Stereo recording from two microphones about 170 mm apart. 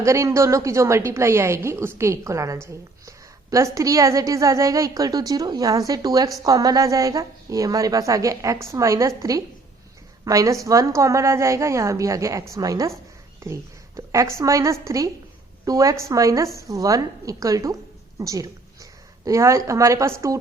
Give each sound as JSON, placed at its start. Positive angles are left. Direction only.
{"t": 0.0, "sound": "a woman's voice", "side_deg": -15}